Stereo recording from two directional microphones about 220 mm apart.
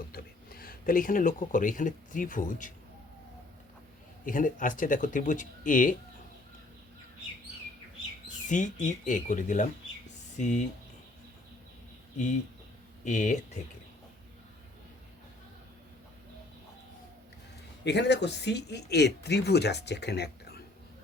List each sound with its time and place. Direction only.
0.1 s speech: 40° left (ahead or behind)
4.3 s speech: 35° left (ahead or behind)
8.4 s speech: 35° left (ahead or behind)
13.1 s speech: 35° left (ahead or behind)
17.8 s speech: 50° left (ahead or behind)